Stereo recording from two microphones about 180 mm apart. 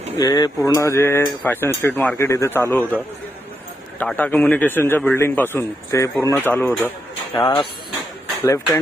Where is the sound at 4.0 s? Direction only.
10° left (ahead or behind).